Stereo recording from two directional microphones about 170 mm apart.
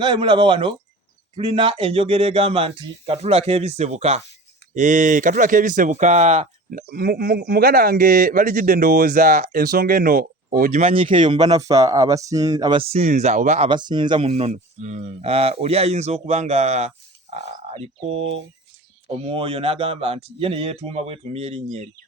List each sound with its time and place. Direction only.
0.0 s speech: 25° right (ahead or behind)
6.7 s speech: 60° right (ahead or behind)
13.7 s speech: 25° right (ahead or behind)